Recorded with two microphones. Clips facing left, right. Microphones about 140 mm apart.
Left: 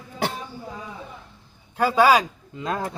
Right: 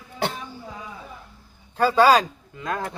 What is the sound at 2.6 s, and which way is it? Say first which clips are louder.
Speech: left 1 dB; 25° left (ahead or behind).